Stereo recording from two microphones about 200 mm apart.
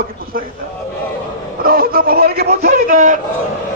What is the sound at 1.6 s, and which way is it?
A man's voice, 45° right (ahead or behind).